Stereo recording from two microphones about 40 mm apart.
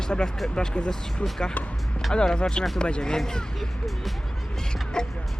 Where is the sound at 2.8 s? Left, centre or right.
Left.